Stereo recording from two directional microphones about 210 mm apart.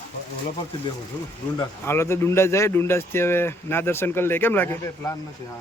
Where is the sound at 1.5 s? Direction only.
10° left (ahead or behind).